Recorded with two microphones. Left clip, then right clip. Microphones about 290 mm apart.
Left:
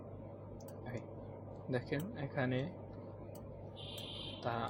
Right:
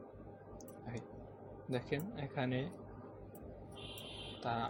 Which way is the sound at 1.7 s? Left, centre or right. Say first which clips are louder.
Even; centre.